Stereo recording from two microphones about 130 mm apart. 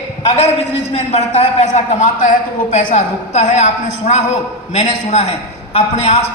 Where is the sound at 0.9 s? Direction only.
50° left (ahead or behind).